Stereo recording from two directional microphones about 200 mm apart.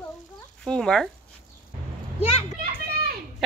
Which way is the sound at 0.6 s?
5° left (ahead or behind).